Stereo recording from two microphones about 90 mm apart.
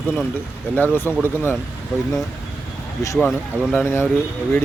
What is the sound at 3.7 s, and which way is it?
Speech, 25° left (ahead or behind).